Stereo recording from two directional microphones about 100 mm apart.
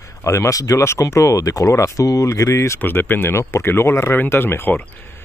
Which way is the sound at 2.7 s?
20° left (ahead or behind).